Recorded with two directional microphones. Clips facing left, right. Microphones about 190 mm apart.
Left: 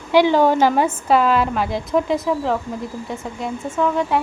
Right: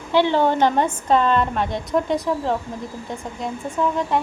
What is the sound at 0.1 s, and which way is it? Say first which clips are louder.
A woman's voice: left 3 dB; 10° left (ahead or behind).